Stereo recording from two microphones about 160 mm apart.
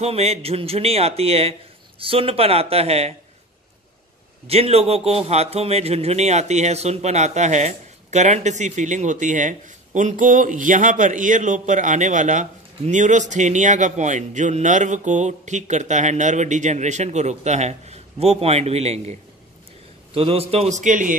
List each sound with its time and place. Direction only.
0.0 s speech: 40° right (ahead or behind)
4.5 s a man's voice: 40° right (ahead or behind)
20.2 s a man's voice: 35° right (ahead or behind); by 21.2 s 55° right (ahead or behind)